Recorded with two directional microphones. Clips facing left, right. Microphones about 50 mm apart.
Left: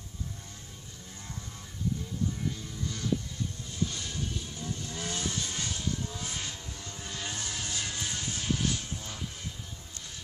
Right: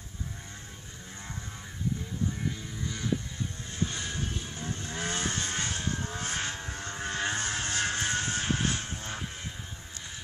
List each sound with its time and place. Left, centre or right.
2.8 s vehicle: centre
3.7 s vehicle: right